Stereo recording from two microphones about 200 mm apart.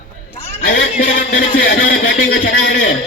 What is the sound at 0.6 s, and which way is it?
A man's voice, 45° left (ahead or behind).